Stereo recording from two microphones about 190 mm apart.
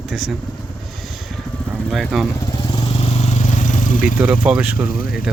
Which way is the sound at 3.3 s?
40° left (ahead or behind).